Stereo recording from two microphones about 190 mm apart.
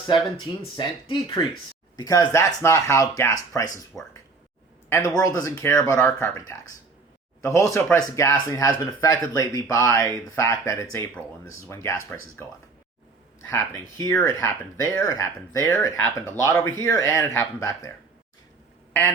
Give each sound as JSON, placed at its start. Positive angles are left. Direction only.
{"t": 0.1, "sound": "speech", "side_deg": 25}
{"t": 3.9, "sound": "speech", "side_deg": 0}
{"t": 4.9, "sound": "speech", "side_deg": 15}